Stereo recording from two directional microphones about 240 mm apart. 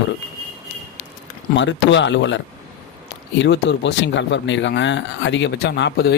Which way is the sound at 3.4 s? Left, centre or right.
Left.